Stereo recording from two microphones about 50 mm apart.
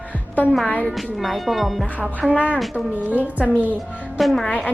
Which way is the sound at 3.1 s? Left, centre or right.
Right.